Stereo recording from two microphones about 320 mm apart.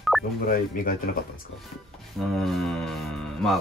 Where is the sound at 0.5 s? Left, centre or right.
Left.